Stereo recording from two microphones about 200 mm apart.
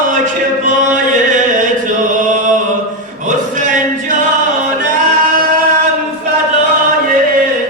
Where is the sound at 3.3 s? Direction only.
40° right (ahead or behind).